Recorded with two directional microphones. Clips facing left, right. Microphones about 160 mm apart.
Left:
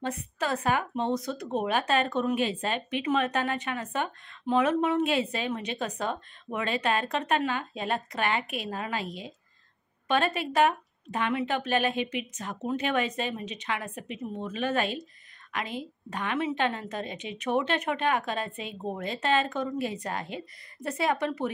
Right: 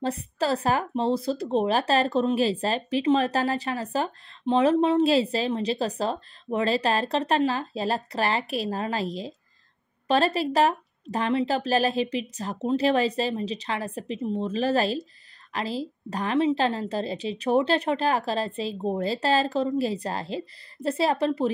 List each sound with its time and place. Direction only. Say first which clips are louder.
0.0 s speech: right 5 dB; 35° right (ahead or behind)